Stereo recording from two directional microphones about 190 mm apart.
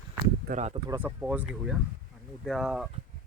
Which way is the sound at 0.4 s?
40° right (ahead or behind).